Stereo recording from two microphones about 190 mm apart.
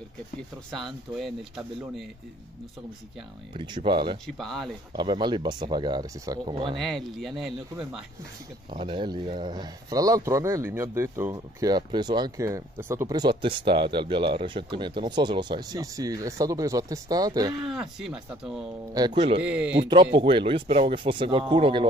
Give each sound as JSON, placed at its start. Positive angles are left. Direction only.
{"t": 0.7, "sound": "speech", "side_deg": 0}
{"t": 3.5, "sound": "speech", "side_deg": -25}
{"t": 4.4, "sound": "speech", "side_deg": 0}
{"t": 4.9, "sound": "speech", "side_deg": -25}
{"t": 6.8, "sound": "speech", "side_deg": 0}
{"t": 8.6, "sound": "speech", "side_deg": -25}
{"t": 17.6, "sound": "speech", "side_deg": 0}
{"t": 18.9, "sound": "speech", "side_deg": -25}
{"t": 19.4, "sound": "a man's voice", "side_deg": -5}
{"t": 19.8, "sound": "speech", "side_deg": -25}